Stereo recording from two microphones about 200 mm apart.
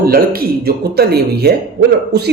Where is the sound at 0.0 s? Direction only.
50° right (ahead or behind).